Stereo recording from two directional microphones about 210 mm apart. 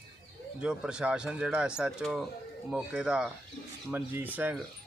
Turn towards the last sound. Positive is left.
turn(degrees=-10)  # may be behind; listen again after turning